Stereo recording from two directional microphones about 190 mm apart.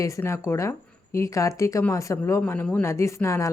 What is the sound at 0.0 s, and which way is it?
A woman's voice, 15° left (ahead or behind).